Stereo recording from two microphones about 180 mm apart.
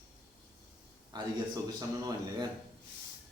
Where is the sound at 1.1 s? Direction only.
20° right (ahead or behind).